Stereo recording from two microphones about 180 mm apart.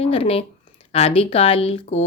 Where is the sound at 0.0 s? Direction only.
30° left (ahead or behind).